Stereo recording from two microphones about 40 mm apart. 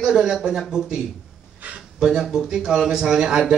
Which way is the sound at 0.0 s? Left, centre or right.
Centre.